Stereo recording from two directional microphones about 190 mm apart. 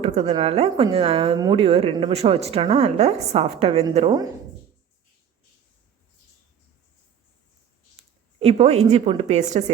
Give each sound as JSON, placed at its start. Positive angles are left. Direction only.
{"t": 0.0, "sound": "a woman's voice", "side_deg": -30}
{"t": 8.0, "sound": "a sound", "side_deg": -30}
{"t": 8.4, "sound": "a woman's voice", "side_deg": -30}